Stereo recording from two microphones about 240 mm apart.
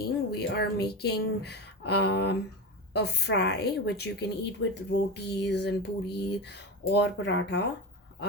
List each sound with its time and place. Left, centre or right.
0.0 s speech: left